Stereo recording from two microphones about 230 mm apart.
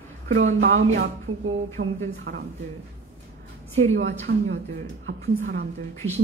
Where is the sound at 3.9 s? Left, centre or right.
Right.